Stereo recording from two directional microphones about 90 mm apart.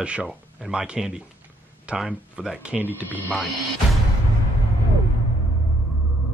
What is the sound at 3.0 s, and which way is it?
Speech, 20° left (ahead or behind).